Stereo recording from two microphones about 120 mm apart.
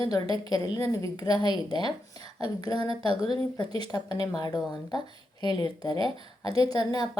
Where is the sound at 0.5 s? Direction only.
35° left (ahead or behind).